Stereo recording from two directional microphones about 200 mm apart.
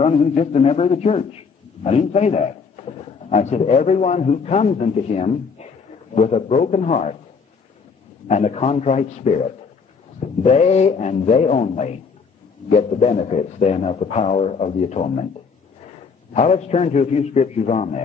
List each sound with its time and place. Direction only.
0.0 s a man's voice: 30° left (ahead or behind)
8.3 s speech: 35° left (ahead or behind)
10.4 s speech: 35° left (ahead or behind)
16.3 s speech: 30° left (ahead or behind)